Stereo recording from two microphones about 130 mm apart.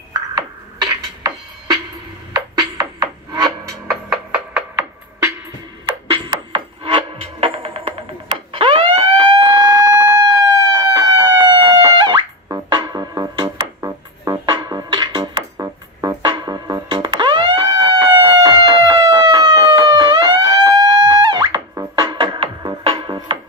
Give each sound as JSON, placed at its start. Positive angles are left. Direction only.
{"t": 0.1, "sound": "music", "side_deg": -30}
{"t": 4.1, "sound": "music", "side_deg": -5}
{"t": 6.3, "sound": "music", "side_deg": -45}